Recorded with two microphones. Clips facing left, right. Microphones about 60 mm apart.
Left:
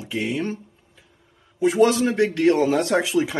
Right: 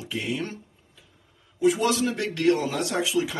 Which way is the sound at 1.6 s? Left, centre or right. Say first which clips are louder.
Left 5 dB; left.